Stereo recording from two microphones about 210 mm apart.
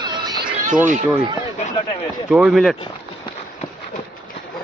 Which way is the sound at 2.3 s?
5° right (ahead or behind).